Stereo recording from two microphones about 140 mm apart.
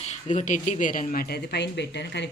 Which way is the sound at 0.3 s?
60° left (ahead or behind).